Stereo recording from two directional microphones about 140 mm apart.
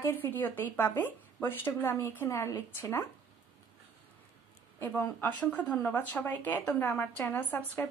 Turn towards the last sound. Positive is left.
turn(degrees=10)  # may be behind; listen again after turning